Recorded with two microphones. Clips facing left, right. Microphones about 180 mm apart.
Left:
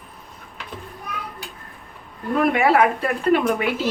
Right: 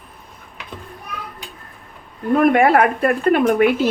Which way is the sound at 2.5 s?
50° right (ahead or behind).